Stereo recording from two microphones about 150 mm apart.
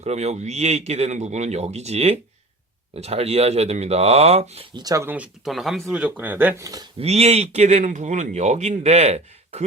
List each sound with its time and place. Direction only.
0.0 s speech: 45° right (ahead or behind)
4.7 s speech: 25° right (ahead or behind)
5.0 s speech: 10° right (ahead or behind)
7.0 s speech: 45° right (ahead or behind)